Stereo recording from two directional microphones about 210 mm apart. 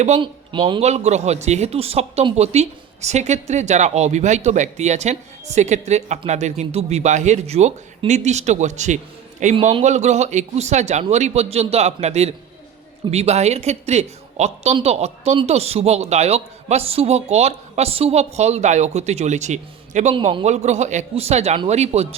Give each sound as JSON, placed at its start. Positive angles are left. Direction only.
{"t": 0.0, "sound": "speech", "side_deg": -25}